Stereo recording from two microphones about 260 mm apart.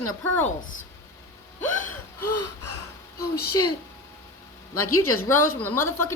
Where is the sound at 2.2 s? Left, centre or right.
Left.